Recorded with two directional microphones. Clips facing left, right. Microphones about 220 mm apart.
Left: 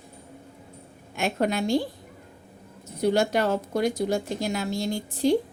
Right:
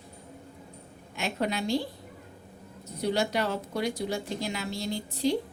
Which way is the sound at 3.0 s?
50° left (ahead or behind).